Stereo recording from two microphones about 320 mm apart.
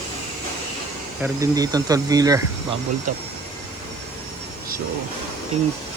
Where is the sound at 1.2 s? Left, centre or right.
Centre.